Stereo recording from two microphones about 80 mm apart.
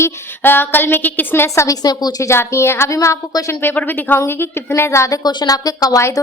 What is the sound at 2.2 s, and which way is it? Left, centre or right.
A woman's voice, left.